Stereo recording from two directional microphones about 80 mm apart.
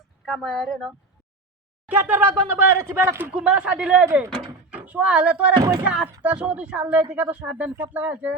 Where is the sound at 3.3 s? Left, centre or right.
Centre.